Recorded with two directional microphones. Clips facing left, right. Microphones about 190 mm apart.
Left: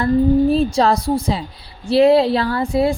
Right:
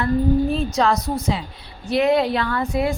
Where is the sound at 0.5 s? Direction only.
35° left (ahead or behind).